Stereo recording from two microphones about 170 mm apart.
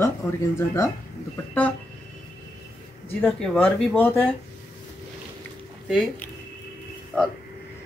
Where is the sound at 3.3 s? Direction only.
5° left (ahead or behind).